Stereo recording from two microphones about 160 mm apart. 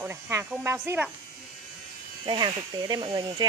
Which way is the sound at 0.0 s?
15° right (ahead or behind).